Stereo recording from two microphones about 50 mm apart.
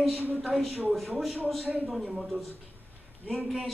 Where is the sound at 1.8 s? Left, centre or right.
Centre.